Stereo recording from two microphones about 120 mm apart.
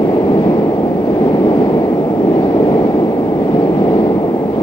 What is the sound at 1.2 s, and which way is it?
Vehicle, 40° left (ahead or behind).